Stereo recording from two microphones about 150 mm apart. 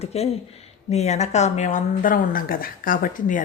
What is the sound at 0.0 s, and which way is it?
A woman's voice, 45° left (ahead or behind).